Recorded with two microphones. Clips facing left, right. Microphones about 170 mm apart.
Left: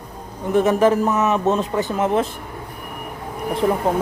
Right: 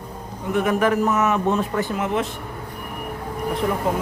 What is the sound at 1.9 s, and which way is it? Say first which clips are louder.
Speech: left 6 dB; 30° left (ahead or behind).